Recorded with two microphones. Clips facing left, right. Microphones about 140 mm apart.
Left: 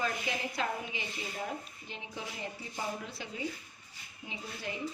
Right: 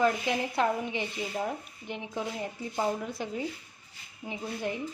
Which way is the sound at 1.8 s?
60° right (ahead or behind).